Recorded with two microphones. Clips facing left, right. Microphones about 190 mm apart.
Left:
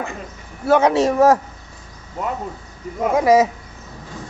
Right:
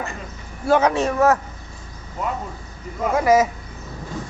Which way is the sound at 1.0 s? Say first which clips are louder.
Left 4 dB; 30° left (ahead or behind).